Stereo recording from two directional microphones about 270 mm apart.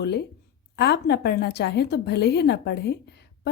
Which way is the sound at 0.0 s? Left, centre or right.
Left.